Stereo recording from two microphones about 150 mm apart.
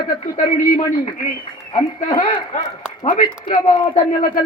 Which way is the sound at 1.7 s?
30° left (ahead or behind).